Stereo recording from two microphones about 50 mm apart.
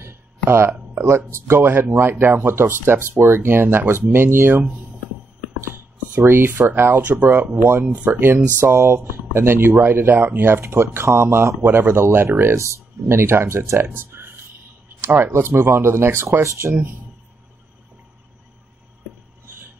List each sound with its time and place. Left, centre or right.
0.0 s a sound: right
0.7 s speech: right
1.1 s speech: right
1.6 s speech: right
6.2 s speech: right
7.8 s speech: right
8.2 s speech: right
8.7 s speech: right
9.8 s speech: right
10.4 s speech: right
12.5 s speech: right
15.0 s a sound: right
15.3 s speech: right